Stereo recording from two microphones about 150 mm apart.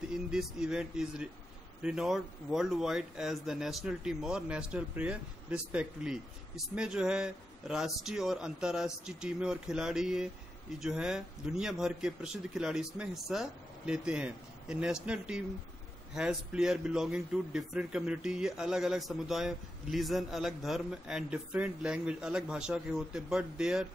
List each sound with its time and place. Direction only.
0.1 s speech: 5° right (ahead or behind)